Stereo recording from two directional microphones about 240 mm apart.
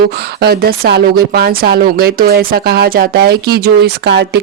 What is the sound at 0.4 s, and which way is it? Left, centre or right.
Speech, right.